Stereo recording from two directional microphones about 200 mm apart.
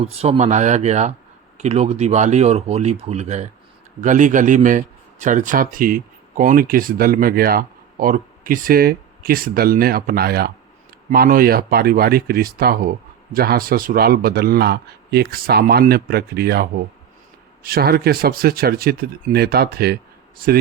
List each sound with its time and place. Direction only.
0.0 s speech: 30° right (ahead or behind); by 20.5 s 50° right (ahead or behind)